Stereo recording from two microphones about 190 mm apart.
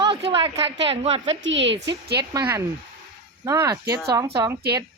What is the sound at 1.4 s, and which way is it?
Speech, 75° right (ahead or behind).